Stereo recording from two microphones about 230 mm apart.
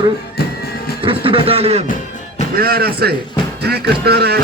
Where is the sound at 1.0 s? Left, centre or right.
Right.